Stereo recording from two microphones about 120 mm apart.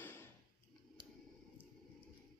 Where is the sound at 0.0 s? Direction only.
20° left (ahead or behind).